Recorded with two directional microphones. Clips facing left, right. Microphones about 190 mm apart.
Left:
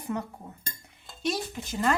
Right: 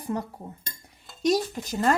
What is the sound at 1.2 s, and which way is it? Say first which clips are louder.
Speech: right 7 dB; 40° right (ahead or behind).